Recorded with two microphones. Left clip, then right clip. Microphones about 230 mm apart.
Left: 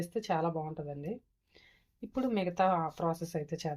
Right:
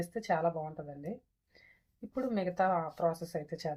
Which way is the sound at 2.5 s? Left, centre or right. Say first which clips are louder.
Left 1 dB; left.